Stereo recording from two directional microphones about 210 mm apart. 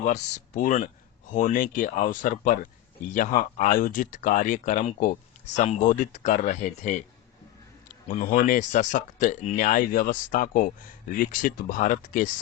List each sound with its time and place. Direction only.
0.0 s speech: 35° left (ahead or behind)
8.0 s speech: 35° left (ahead or behind)